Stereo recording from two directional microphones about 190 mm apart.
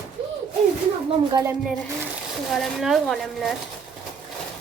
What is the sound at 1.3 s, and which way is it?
Speech, 20° right (ahead or behind).